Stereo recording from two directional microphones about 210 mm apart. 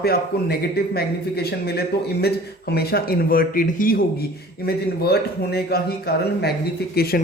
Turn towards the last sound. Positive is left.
turn(degrees=45)  # may be behind; listen again after turning